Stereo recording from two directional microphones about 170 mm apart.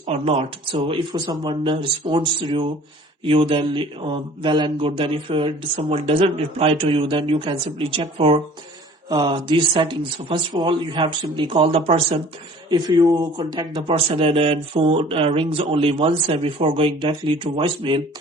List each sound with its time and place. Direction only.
0.0 s speech: 35° right (ahead or behind)
12.7 s speech: 20° right (ahead or behind)